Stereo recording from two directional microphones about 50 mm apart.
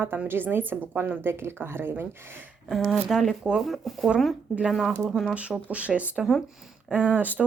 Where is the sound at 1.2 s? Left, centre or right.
Right.